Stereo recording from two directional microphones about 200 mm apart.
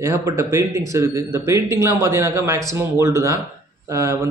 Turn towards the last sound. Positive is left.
turn(degrees=-15)  # may be behind; listen again after turning